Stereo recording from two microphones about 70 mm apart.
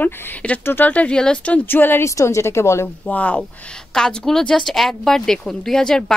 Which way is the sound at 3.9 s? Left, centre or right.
Centre.